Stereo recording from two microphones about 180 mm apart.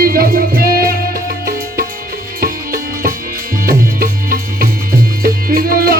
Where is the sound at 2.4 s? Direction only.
55° right (ahead or behind).